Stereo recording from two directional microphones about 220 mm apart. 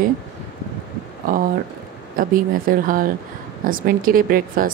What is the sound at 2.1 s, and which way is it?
Speech, 40° right (ahead or behind).